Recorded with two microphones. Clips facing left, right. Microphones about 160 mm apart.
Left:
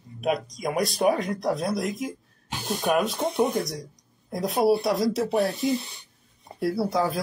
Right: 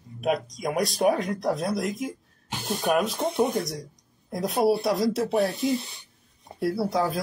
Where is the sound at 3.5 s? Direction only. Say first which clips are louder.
Left 1 dB; 35° right (ahead or behind).